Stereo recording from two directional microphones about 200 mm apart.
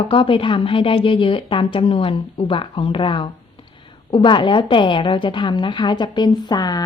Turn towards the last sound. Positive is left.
turn(degrees=20)  # may be behind; listen again after turning